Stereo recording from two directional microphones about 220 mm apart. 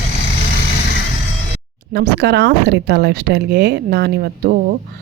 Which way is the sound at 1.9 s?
50° right (ahead or behind).